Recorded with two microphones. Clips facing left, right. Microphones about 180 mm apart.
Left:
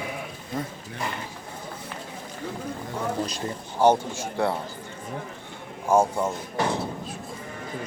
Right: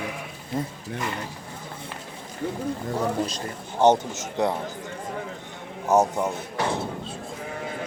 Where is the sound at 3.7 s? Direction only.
20° right (ahead or behind).